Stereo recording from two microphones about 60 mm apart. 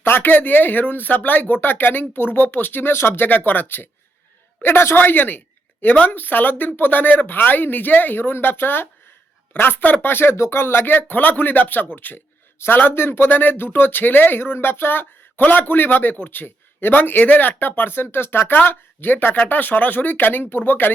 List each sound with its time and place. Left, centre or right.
0.0 s speech: left